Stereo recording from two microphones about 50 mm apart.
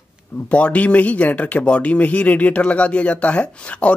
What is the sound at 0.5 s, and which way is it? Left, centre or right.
Speech, left.